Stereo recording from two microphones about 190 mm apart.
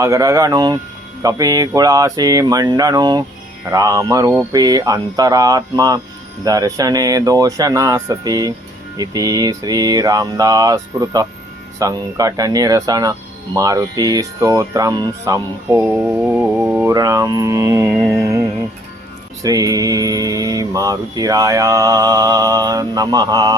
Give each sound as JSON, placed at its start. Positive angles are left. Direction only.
{"t": 0.0, "sound": "mantra", "side_deg": -15}
{"t": 16.9, "sound": "mantra", "side_deg": -20}